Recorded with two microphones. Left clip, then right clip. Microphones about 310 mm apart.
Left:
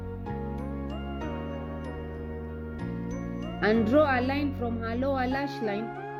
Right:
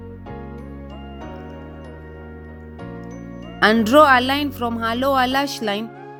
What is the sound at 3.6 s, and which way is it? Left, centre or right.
A woman's voice, right.